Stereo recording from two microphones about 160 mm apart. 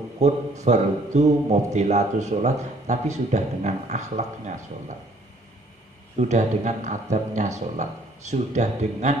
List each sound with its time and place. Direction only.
0.2 s a man's voice: 45° right (ahead or behind)
6.1 s a man's voice: 45° right (ahead or behind)